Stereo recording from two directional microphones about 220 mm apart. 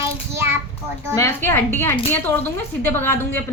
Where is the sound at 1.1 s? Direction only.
10° left (ahead or behind).